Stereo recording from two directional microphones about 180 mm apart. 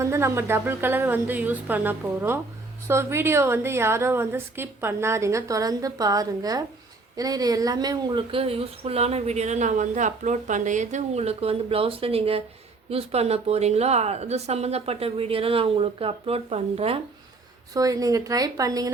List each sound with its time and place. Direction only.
0.0 s a woman's voice: 15° right (ahead or behind); by 17.0 s 35° right (ahead or behind)
17.7 s a woman's voice: 20° right (ahead or behind)